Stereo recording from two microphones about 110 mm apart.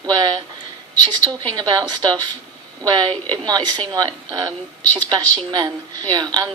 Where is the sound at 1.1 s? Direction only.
40° right (ahead or behind).